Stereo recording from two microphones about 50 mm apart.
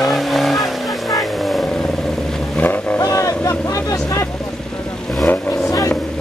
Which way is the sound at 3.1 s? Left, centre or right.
Left.